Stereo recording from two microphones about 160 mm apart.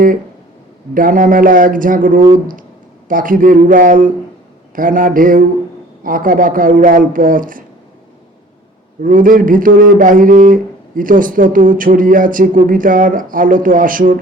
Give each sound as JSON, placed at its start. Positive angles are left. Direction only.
{"t": 0.9, "sound": "speech", "side_deg": -60}
{"t": 9.0, "sound": "speech", "side_deg": -55}